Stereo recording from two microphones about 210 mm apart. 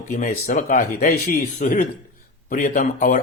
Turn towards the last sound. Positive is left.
turn(degrees=40)  # may be behind; listen again after turning